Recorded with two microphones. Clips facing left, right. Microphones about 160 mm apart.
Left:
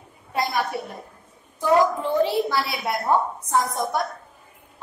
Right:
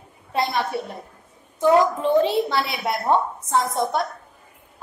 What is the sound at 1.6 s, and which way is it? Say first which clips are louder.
A woman's voice: right 2 dB; 20° right (ahead or behind).